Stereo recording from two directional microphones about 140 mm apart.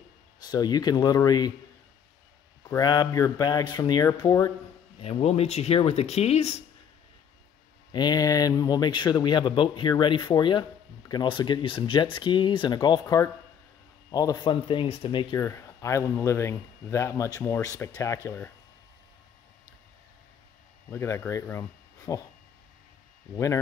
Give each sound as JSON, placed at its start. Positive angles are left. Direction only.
{"t": 0.4, "sound": "speech", "side_deg": 30}
{"t": 2.8, "sound": "speech", "side_deg": 30}
{"t": 5.0, "sound": "speech", "side_deg": 45}
{"t": 7.9, "sound": "speech", "side_deg": 30}
{"t": 15.4, "sound": "speech", "side_deg": 20}
{"t": 20.9, "sound": "speech", "side_deg": 15}
{"t": 23.3, "sound": "speech", "side_deg": 20}